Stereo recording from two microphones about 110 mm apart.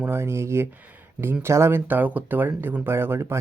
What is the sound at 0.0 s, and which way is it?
Speech, 20° right (ahead or behind).